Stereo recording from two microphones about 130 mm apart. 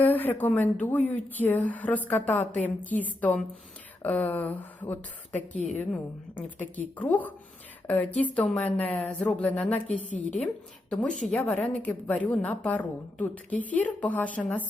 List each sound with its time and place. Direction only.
0.0 s a woman's voice: 15° left (ahead or behind)
10.0 s a woman's voice: 65° left (ahead or behind)
10.4 s a woman's voice: 10° left (ahead or behind)